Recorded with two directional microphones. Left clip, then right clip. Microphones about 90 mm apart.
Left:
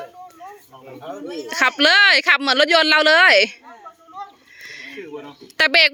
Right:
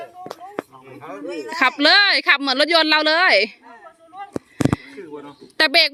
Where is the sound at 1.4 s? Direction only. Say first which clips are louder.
Even; 15° right (ahead or behind).